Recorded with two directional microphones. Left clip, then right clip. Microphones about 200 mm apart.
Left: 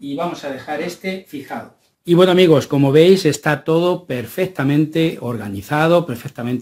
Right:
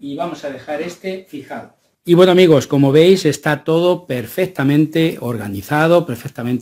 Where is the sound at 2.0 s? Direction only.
20° right (ahead or behind).